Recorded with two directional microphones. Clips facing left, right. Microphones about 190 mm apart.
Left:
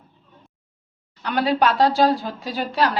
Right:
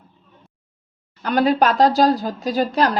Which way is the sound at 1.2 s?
45° right (ahead or behind).